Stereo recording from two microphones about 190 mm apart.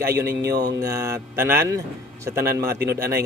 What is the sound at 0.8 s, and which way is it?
Speech, 15° right (ahead or behind).